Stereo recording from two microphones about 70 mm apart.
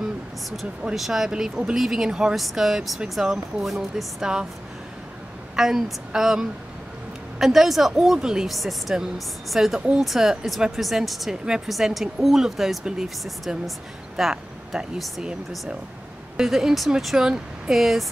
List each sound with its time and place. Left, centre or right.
0.9 s speech: centre
5.6 s speech: centre
16.3 s speech: centre